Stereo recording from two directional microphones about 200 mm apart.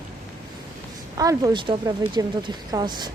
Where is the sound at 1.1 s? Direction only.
15° right (ahead or behind).